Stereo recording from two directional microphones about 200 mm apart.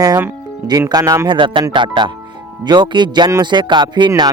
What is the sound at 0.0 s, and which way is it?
Speech, 15° right (ahead or behind).